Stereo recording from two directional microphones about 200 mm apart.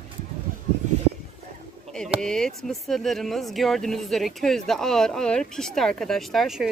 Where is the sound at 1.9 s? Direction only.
5° left (ahead or behind).